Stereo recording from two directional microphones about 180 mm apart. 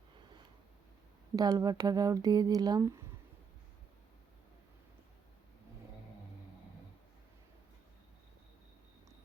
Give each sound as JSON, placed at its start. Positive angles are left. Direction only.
{"t": 1.4, "sound": "speech", "side_deg": -20}